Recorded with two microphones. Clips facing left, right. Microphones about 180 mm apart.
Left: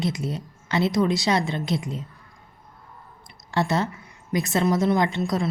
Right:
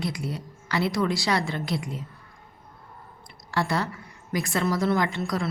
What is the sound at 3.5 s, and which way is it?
A woman's voice, 20° left (ahead or behind).